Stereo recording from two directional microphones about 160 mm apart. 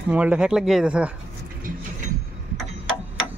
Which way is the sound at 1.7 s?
60° right (ahead or behind).